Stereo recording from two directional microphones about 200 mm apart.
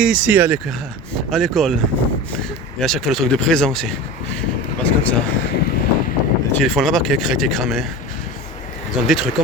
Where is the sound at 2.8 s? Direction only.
Centre (ahead or behind).